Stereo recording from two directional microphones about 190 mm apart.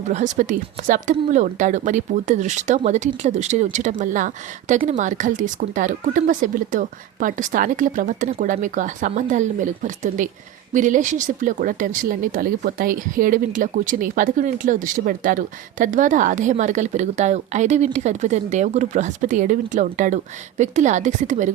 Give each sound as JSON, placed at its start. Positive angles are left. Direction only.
{"t": 0.1, "sound": "speech", "side_deg": -40}